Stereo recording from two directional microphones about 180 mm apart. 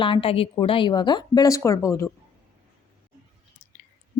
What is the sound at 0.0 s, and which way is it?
A woman's voice, 30° left (ahead or behind).